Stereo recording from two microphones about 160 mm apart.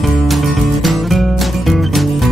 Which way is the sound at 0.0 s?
Centre (ahead or behind).